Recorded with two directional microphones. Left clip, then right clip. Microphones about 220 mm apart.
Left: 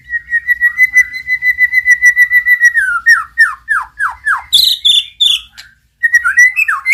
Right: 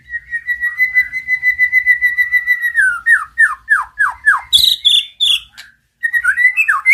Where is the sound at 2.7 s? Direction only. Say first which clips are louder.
Left 2 dB; centre (ahead or behind).